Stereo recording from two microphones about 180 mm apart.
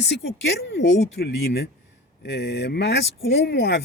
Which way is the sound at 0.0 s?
85° left.